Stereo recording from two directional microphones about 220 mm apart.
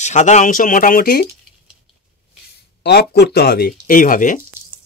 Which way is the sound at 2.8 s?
45° left (ahead or behind).